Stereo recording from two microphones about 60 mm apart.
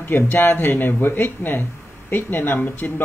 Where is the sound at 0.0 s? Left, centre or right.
Left.